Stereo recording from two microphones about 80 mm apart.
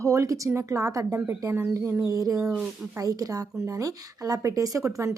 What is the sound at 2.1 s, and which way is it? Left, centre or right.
Speech, right.